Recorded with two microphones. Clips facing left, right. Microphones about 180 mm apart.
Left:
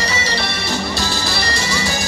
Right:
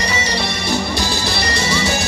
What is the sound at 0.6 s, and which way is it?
Music, 15° right (ahead or behind).